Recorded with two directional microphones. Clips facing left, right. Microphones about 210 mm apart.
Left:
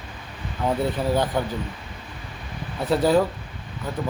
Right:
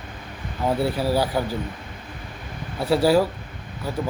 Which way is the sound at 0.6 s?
5° right (ahead or behind).